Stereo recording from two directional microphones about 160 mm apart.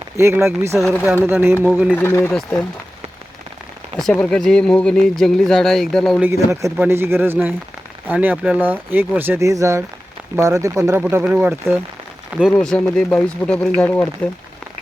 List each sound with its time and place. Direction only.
0.2 s speech: 15° right (ahead or behind)
0.8 s speech: centre (ahead or behind)
1.3 s speech: 15° right (ahead or behind)
2.0 s speech: 15° left (ahead or behind)
3.9 s speech: 5° left (ahead or behind)
6.2 s speech: 20° right (ahead or behind)
11.1 s speech: 10° right (ahead or behind)
12.4 s speech: centre (ahead or behind)